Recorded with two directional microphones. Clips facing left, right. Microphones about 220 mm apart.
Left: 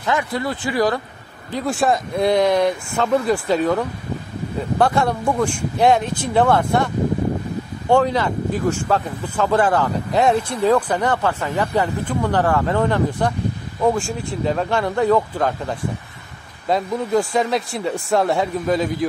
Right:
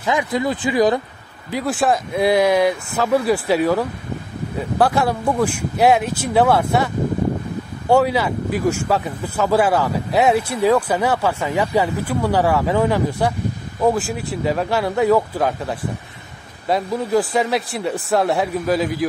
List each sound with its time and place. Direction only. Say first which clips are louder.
0.0 s speech: right 2 dB; 15° right (ahead or behind)
1.5 s speech: even; 5° right (ahead or behind)
7.9 s speech: right 1 dB; 10° right (ahead or behind)